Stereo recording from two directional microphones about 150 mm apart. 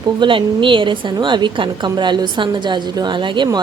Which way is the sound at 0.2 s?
35° right (ahead or behind).